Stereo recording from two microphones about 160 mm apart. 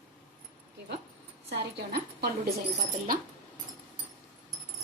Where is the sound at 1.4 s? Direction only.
90° right.